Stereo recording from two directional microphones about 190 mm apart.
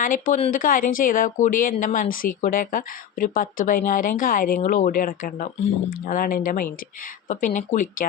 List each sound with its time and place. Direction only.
0.0 s a woman's voice: 45° left (ahead or behind)